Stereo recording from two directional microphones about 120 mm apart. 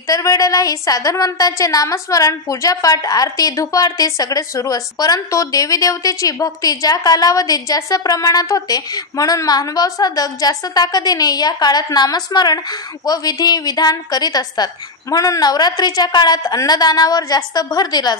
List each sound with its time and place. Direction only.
0.1 s a woman's voice: 30° left (ahead or behind)